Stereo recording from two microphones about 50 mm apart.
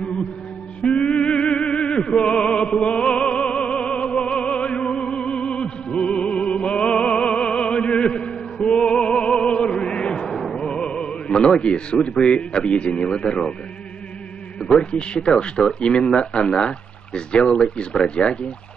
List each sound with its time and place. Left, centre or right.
0.8 s music: centre
2.1 s opera: centre
2.4 s music: left
2.9 s opera: centre
4.2 s music: left
6.8 s opera: centre
7.9 s chant: centre
9.0 s music: centre
9.3 s music: centre
9.6 s music: centre
10.3 s music: centre
10.6 s speech: centre
14.6 s speech: centre